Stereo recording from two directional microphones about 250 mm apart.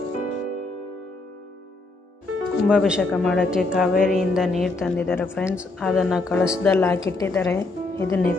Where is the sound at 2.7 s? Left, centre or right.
Centre.